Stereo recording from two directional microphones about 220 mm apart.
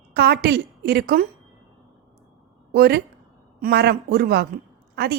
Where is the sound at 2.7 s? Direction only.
45° right (ahead or behind).